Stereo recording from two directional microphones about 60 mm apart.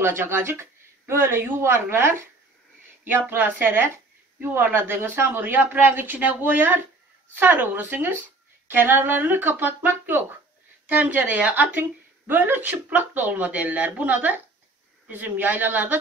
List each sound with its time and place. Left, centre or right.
0.0 s speech: right